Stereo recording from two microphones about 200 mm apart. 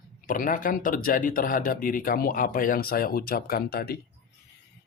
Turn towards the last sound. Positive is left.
turn(degrees=50)  # may be behind; listen again after turning